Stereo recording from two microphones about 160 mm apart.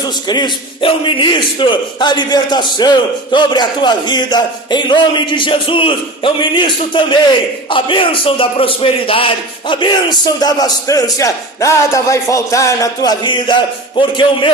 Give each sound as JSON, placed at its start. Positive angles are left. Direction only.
{"t": 0.0, "sound": "a man's voice", "side_deg": 25}